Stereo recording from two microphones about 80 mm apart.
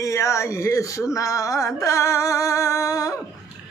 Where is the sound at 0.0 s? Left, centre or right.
Left.